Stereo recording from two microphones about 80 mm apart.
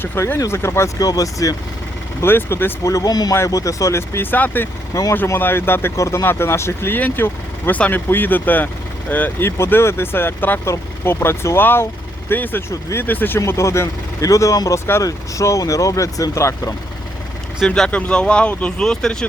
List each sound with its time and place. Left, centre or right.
0.0 s speech: left
0.9 s speech: left
2.2 s speech: left
2.8 s speech: left
3.3 s speech: left
6.0 s speech: left
13.4 s speech: left
17.7 s speech: centre